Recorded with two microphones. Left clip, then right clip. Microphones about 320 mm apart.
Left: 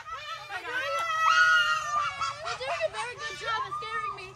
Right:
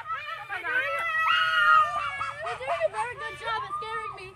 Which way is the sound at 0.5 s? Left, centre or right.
Centre.